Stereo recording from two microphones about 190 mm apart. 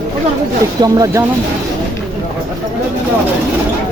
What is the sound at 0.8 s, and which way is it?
Speech, 20° right (ahead or behind).